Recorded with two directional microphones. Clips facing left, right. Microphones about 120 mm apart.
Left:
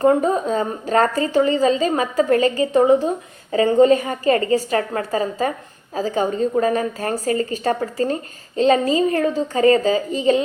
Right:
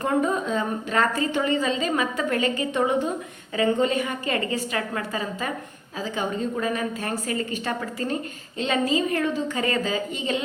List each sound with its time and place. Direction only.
0.0 s a woman's voice: 35° left (ahead or behind)